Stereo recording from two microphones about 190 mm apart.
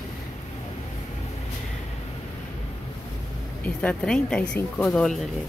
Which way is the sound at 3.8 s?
5° left (ahead or behind).